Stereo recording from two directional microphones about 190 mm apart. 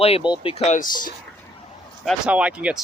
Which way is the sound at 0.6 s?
45° left (ahead or behind).